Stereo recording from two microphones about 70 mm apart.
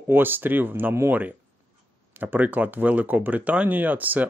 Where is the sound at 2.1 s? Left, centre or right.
Right.